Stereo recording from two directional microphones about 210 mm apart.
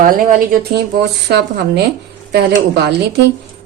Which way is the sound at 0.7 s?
50° right (ahead or behind).